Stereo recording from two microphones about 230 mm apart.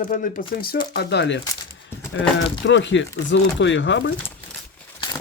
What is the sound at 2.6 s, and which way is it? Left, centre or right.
Speech, left.